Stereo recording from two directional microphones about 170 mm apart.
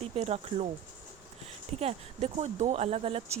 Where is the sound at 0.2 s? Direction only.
40° right (ahead or behind).